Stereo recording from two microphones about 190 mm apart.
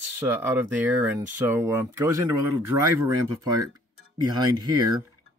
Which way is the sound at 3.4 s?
20° right (ahead or behind).